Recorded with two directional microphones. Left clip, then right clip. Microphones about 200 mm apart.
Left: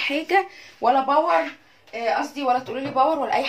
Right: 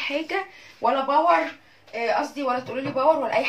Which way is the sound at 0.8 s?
50° left (ahead or behind).